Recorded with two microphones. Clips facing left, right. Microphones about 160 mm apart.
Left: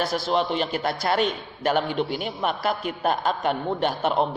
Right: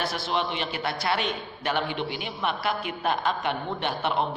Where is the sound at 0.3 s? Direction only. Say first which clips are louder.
Left 4 dB; centre (ahead or behind).